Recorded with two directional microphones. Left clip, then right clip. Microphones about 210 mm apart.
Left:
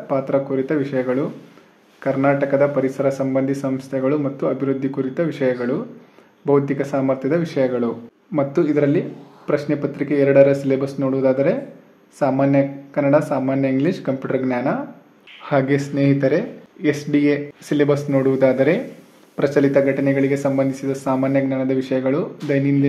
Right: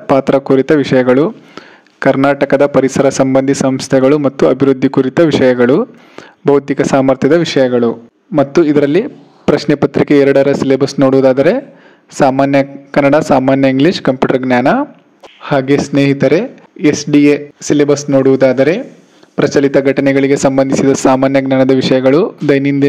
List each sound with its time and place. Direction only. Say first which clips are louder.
0.0 s a man's voice: right 9 dB; 40° right (ahead or behind)
15.4 s a man's voice: right 7 dB; 30° right (ahead or behind)